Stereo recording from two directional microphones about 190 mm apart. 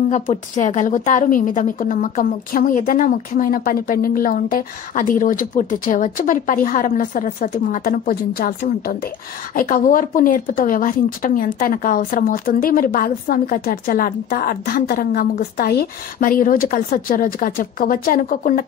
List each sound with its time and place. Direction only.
0.1 s speech: 40° left (ahead or behind)